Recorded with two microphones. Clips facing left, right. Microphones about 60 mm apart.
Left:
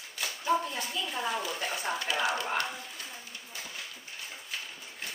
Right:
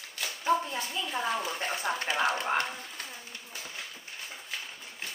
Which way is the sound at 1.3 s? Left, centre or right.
Right.